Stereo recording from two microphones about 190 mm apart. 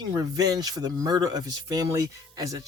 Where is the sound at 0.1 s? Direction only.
20° right (ahead or behind).